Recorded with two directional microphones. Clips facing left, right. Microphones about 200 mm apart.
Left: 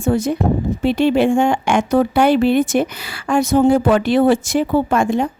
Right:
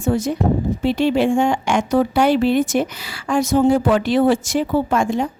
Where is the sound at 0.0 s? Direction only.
60° left (ahead or behind).